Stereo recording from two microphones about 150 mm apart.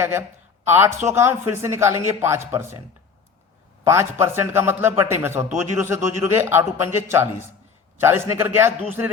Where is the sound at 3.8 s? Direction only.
15° right (ahead or behind).